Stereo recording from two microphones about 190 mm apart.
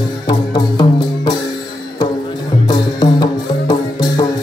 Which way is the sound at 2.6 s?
20° left (ahead or behind).